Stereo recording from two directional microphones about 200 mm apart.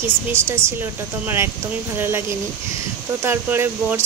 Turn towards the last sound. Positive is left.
turn(degrees=-10)  # may be behind; listen again after turning